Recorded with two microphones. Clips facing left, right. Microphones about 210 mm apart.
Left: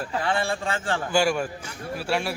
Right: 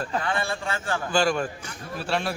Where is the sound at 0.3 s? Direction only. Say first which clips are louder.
Left 2 dB; 30° left (ahead or behind).